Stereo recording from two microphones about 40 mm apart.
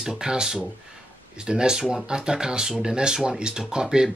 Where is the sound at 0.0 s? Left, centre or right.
Centre.